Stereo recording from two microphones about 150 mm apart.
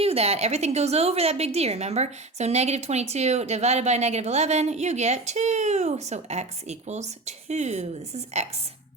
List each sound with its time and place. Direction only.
0.0 s a woman's voice: 40° right (ahead or behind)